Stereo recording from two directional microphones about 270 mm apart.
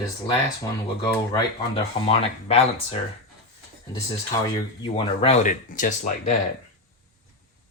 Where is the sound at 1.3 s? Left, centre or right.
Centre.